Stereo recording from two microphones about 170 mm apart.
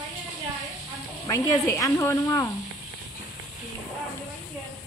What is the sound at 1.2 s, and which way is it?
Speech, 20° left (ahead or behind).